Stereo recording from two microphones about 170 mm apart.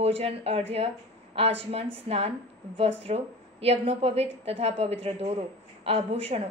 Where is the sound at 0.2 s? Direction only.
35° right (ahead or behind).